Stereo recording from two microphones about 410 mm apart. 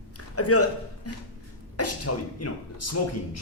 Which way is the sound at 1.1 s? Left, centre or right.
Left.